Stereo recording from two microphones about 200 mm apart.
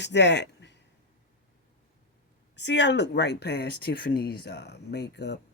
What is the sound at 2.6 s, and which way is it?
Speech, 60° left (ahead or behind).